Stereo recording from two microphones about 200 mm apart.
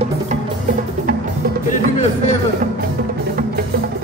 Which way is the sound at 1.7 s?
40° left (ahead or behind).